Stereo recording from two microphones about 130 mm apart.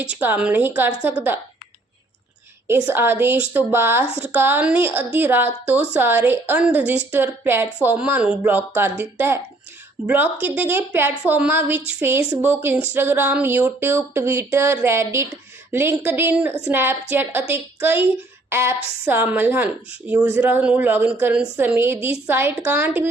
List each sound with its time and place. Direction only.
0.0 s a woman's voice: 10° right (ahead or behind)
2.6 s a woman's voice: 20° right (ahead or behind)